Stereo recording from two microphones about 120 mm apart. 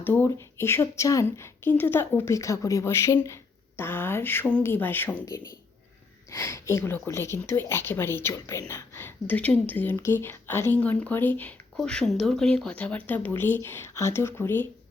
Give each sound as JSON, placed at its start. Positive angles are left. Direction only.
{"t": 0.0, "sound": "speech", "side_deg": 15}